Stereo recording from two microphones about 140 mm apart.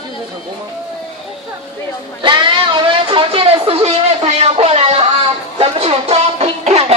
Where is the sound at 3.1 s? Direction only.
40° right (ahead or behind).